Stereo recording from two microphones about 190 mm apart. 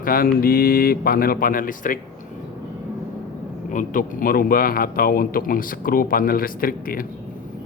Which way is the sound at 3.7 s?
45° left (ahead or behind).